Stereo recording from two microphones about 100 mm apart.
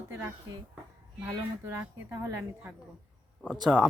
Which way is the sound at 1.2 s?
25° right (ahead or behind).